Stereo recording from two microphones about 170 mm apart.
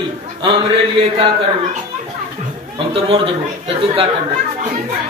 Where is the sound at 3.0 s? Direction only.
30° right (ahead or behind).